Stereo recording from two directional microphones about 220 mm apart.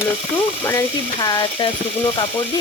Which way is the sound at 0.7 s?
15° left (ahead or behind).